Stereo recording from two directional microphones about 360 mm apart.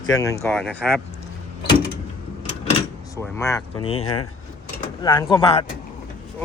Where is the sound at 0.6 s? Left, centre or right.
Centre.